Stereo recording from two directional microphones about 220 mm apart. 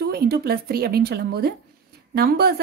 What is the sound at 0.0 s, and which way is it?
A woman's voice, 45° right (ahead or behind).